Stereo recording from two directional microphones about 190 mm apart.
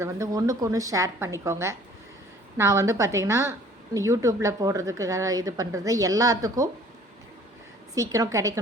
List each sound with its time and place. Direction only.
0.0 s speech: 15° right (ahead or behind)
7.9 s speech: 15° right (ahead or behind)